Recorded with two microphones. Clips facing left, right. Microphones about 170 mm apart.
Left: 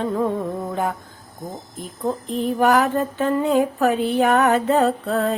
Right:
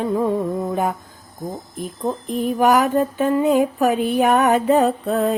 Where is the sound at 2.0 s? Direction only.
15° right (ahead or behind).